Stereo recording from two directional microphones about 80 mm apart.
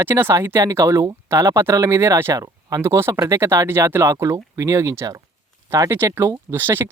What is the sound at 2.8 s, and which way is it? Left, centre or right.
Speech, right.